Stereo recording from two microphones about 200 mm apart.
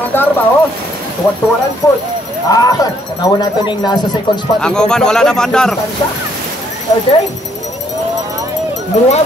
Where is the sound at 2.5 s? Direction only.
20° left (ahead or behind).